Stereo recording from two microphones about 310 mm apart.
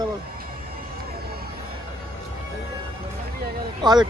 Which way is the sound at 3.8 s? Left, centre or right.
Centre.